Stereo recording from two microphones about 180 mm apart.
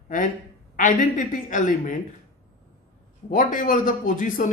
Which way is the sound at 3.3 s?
45° left (ahead or behind).